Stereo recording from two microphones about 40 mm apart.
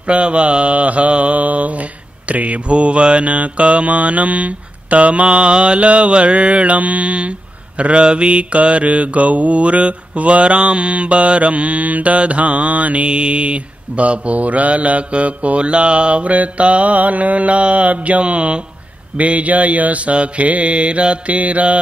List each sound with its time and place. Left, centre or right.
0.0 s mantra: right